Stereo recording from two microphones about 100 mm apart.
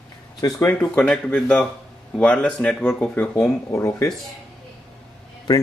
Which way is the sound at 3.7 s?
30° left (ahead or behind).